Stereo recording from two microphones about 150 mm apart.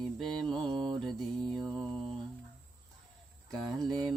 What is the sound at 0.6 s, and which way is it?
Mantra, 30° right (ahead or behind).